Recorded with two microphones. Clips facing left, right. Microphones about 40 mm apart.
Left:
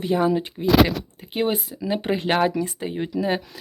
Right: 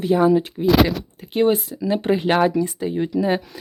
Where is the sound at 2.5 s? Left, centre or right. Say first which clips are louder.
Right 4 dB; left.